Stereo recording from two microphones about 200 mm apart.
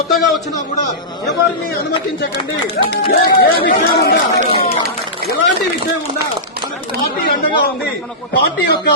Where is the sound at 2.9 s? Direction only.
55° left (ahead or behind).